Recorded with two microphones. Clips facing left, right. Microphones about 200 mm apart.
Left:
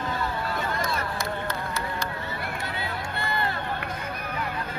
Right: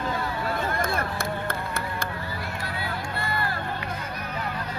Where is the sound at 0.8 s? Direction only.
55° right (ahead or behind).